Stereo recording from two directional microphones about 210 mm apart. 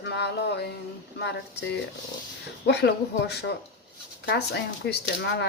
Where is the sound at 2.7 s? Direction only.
50° left (ahead or behind).